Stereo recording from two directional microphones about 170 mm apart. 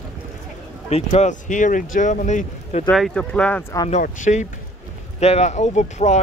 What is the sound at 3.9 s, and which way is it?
Speech, 45° left (ahead or behind).